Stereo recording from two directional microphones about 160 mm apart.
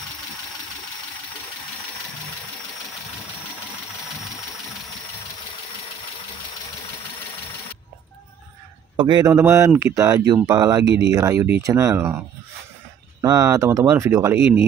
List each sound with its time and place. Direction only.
8.9 s speech: 25° right (ahead or behind)
13.2 s speech: 20° right (ahead or behind)